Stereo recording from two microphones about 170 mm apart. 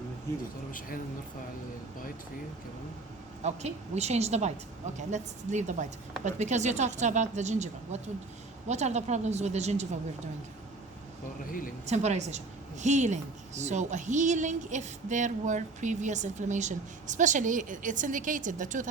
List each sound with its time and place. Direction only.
3.4 s a woman's voice: 40° right (ahead or behind)
11.9 s a woman's voice: 40° right (ahead or behind)